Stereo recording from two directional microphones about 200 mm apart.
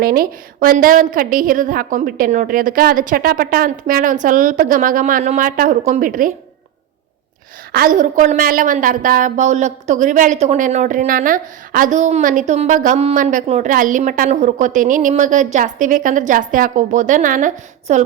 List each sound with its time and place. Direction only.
0.0 s a woman's voice: 45° right (ahead or behind)
7.7 s a woman's voice: 45° right (ahead or behind)